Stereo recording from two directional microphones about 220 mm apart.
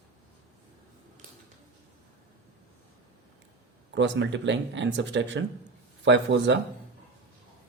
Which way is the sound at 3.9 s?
55° right (ahead or behind).